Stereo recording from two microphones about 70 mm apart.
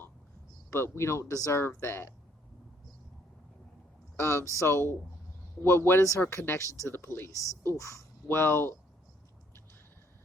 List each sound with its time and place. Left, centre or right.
0.7 s speech: left
1.3 s speech: left
1.5 s speech: left
4.2 s speech: left
8.3 s speech: left